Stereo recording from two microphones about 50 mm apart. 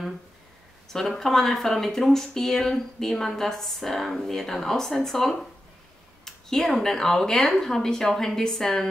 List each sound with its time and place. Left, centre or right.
1.1 s speech: centre